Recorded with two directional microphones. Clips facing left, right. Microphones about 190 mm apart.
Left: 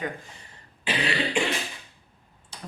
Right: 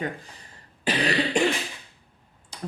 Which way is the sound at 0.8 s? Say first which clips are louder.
Right 3 dB; 40° right (ahead or behind).